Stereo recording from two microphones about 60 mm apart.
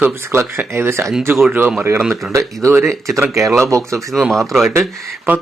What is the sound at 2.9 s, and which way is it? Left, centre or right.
Speech, centre.